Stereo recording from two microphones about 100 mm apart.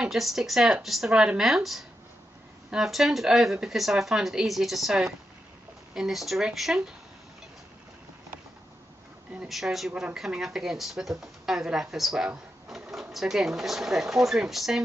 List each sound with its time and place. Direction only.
0.0 s speech: centre (ahead or behind)
9.5 s speech: centre (ahead or behind)